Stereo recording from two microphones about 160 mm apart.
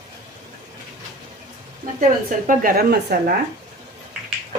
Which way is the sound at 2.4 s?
65° right (ahead or behind).